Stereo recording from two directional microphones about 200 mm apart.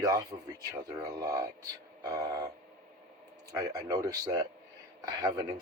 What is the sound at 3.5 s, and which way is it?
Speech, 20° right (ahead or behind).